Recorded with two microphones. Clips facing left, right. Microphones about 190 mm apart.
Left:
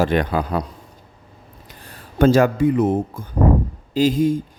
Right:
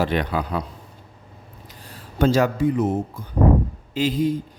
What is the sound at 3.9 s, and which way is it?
Speech, 40° left (ahead or behind).